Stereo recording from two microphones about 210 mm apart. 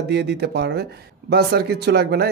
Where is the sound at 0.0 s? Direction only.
55° right (ahead or behind).